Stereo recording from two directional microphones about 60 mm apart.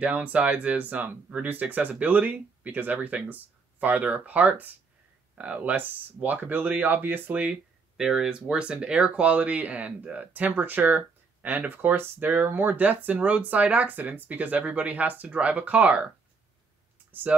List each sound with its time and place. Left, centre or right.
0.0 s speech: right
8.0 s speech: centre
17.1 s speech: right